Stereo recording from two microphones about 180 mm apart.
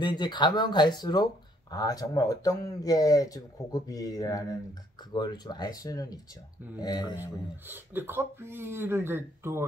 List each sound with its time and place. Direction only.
0.0 s speech: 25° left (ahead or behind)
7.6 s speech: 10° right (ahead or behind)